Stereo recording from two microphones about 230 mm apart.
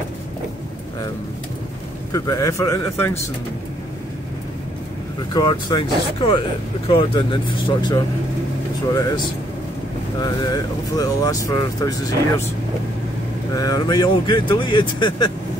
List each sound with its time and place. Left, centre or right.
2.1 s speech: centre
5.3 s speech: centre
13.5 s speech: centre